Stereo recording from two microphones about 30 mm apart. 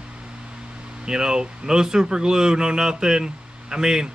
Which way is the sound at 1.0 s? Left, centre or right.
Right.